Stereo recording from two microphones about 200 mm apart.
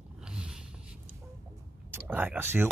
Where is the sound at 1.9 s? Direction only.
10° right (ahead or behind).